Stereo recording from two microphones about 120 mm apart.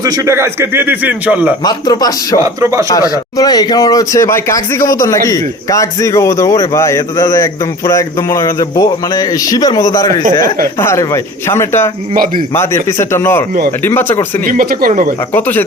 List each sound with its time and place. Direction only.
0.0 s a man's voice: 25° right (ahead or behind)
1.6 s speech: 35° left (ahead or behind)
2.4 s a man's voice: 25° right (ahead or behind)
2.9 s speech: 30° left (ahead or behind)
10.3 s speech: 25° left (ahead or behind)
15.3 s speech: 15° left (ahead or behind)